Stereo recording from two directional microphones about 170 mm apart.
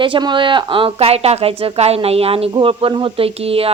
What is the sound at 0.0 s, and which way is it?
Speech, 30° right (ahead or behind).